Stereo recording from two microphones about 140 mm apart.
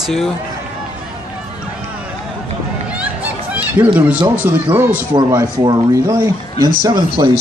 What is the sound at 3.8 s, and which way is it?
Speech, 10° right (ahead or behind).